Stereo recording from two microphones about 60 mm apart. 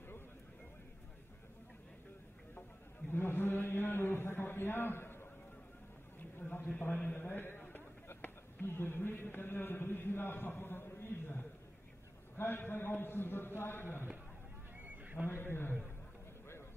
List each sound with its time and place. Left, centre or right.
3.1 s chant: left
6.1 s a sound: left
6.8 s a man's voice: left
7.1 s a sound: left
12.4 s a man's voice: left
15.2 s a man's voice: left